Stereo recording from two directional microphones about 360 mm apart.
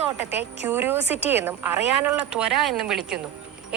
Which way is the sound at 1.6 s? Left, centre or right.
Right.